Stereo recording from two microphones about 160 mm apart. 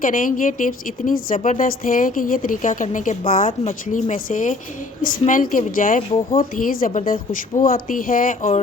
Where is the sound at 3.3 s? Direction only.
60° left (ahead or behind).